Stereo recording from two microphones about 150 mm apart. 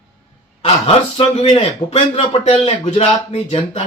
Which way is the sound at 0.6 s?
40° left (ahead or behind).